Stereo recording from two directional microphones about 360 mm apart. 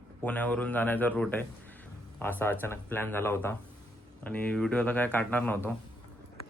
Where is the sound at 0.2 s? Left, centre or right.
Centre.